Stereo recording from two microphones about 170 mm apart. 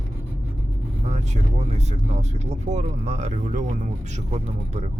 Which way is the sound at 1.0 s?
40° right (ahead or behind).